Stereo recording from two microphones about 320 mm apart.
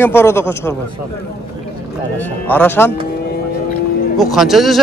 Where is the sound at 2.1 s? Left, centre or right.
Centre.